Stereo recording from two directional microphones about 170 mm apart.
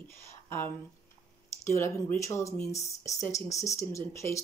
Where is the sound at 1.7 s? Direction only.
15° left (ahead or behind).